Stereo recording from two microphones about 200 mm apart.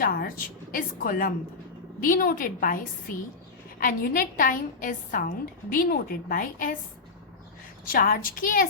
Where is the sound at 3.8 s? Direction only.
45° left (ahead or behind).